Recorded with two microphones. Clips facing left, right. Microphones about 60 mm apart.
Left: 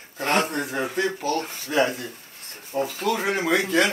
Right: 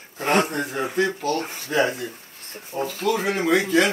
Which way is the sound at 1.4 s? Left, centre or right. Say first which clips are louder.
Right 2 dB; centre.